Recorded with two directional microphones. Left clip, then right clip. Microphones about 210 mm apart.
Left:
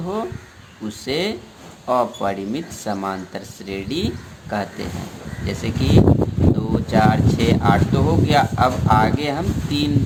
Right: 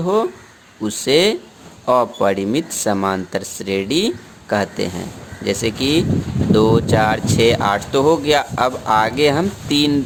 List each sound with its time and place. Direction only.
0.0 s speech: 50° right (ahead or behind)